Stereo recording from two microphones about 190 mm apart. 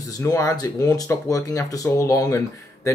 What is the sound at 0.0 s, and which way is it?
Speech, 15° left (ahead or behind).